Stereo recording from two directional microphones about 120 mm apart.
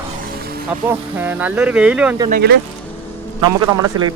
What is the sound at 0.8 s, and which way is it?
Speech, 15° right (ahead or behind).